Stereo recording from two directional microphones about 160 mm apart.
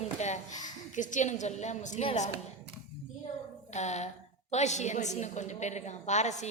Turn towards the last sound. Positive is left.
turn(degrees=45)  # may be behind; listen again after turning